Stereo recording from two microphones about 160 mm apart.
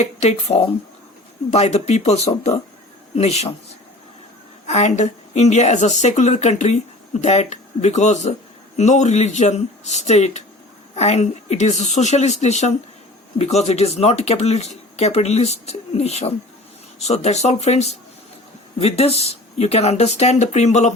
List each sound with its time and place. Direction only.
0.0 s a woman's voice: 40° left (ahead or behind)
4.6 s a woman's voice: 45° left (ahead or behind)